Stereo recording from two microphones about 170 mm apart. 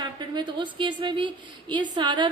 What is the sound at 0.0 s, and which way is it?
A woman's voice, 25° right (ahead or behind).